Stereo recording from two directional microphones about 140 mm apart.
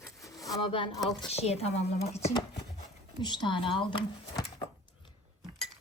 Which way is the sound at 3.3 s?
35° left (ahead or behind).